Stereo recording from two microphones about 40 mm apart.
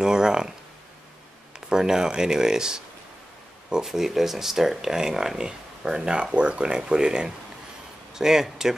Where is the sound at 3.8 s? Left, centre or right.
Centre.